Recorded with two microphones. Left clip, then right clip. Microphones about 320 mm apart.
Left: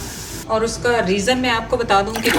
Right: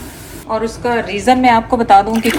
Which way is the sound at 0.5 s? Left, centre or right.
Right.